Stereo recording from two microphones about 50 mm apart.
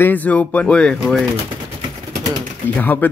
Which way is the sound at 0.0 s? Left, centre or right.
Left.